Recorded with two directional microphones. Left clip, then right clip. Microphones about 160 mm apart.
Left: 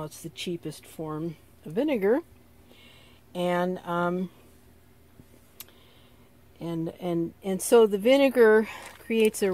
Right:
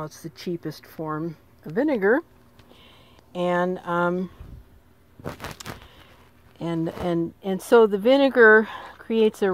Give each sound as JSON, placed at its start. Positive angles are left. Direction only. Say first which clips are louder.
{"t": 0.2, "sound": "speech", "louder": "right 2 dB", "side_deg": -60}
{"t": 0.8, "sound": "speech", "louder": "right 5 dB", "side_deg": -10}
{"t": 3.3, "sound": "speech", "louder": "right 4 dB", "side_deg": -10}
{"t": 6.6, "sound": "speech", "louder": "right 5 dB", "side_deg": -15}
{"t": 7.2, "sound": "speech", "louder": "right 3 dB", "side_deg": -5}